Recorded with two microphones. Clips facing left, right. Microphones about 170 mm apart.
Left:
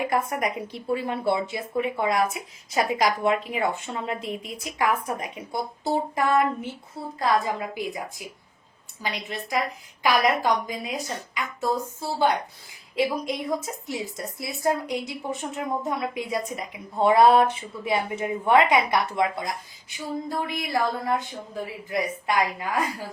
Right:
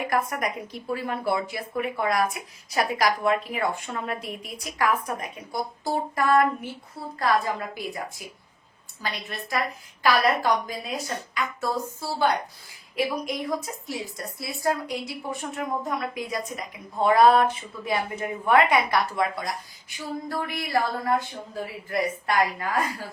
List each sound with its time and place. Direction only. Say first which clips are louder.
0.0 s a woman's voice: left 1 dB; 25° left (ahead or behind)
9.0 s a woman's voice: left 2 dB; 15° left (ahead or behind)